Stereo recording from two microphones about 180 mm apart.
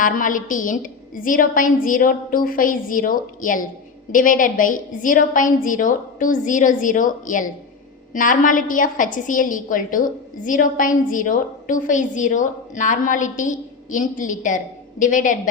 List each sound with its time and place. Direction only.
0.0 s a woman's voice: 50° left (ahead or behind)